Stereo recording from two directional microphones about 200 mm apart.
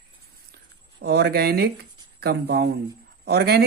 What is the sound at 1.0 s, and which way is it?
Speech, 55° right (ahead or behind).